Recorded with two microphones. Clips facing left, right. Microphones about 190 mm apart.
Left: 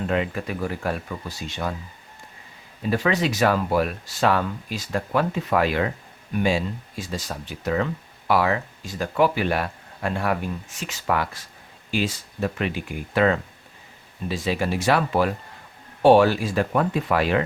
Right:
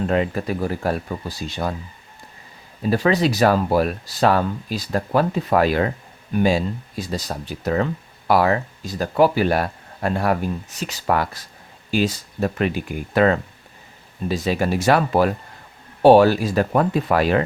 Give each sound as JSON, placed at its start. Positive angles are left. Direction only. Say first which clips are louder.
{"t": 0.1, "sound": "speech", "louder": "right 4 dB", "side_deg": -40}
{"t": 2.9, "sound": "speech", "louder": "right 4 dB", "side_deg": -35}